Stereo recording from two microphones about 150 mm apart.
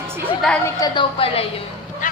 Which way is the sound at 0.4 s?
5° left (ahead or behind).